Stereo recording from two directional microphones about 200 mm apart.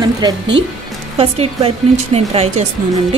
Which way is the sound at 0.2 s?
20° right (ahead or behind).